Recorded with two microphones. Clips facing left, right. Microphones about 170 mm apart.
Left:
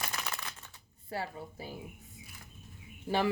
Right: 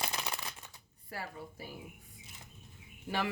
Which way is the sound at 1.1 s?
25° left (ahead or behind).